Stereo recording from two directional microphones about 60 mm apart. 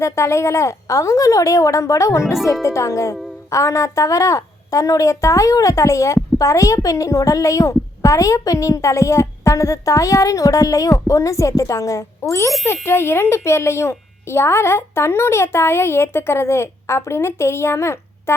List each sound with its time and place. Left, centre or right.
0.0 s a woman's voice: left
12.6 s a child's voice: left